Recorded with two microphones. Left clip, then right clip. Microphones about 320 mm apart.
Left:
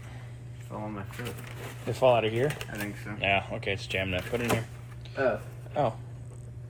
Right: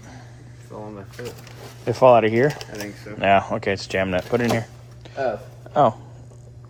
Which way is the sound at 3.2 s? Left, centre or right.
Right.